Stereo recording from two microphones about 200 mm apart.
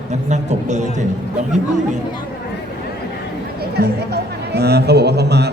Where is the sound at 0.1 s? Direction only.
35° right (ahead or behind).